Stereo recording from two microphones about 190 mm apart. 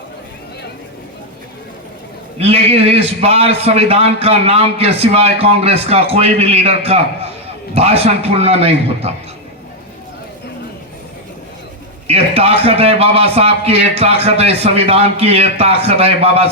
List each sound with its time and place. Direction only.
2.4 s a man's voice: 30° right (ahead or behind)
12.0 s a man's voice: 30° right (ahead or behind)